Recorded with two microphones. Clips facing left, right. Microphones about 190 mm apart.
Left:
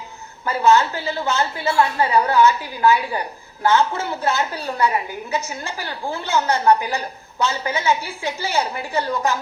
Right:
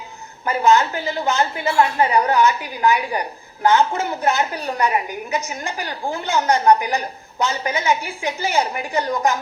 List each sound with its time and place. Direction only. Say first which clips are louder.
0.4 s a woman's voice: even; 15° right (ahead or behind)